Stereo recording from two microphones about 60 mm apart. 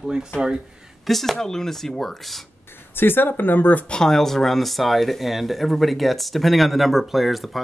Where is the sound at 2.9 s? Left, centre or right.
Left.